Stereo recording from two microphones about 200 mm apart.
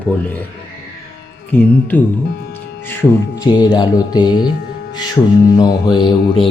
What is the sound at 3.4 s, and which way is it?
Speech, 20° left (ahead or behind).